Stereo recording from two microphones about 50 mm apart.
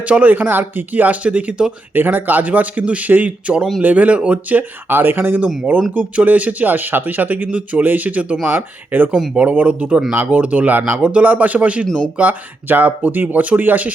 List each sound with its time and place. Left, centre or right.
0.1 s speech: right
2.0 s speech: right
5.2 s speech: right
9.3 s speech: right
12.3 s speech: right